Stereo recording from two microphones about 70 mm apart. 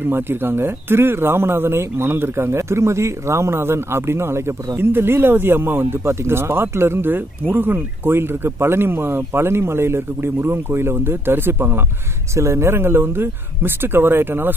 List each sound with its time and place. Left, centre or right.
0.1 s speech: right